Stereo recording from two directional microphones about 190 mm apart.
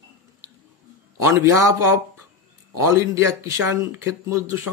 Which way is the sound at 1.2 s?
15° right (ahead or behind).